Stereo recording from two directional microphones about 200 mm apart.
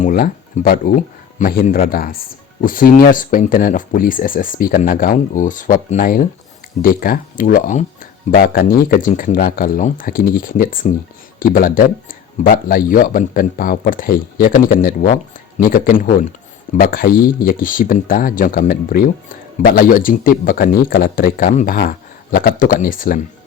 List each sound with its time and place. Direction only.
0.0 s speech: 40° left (ahead or behind)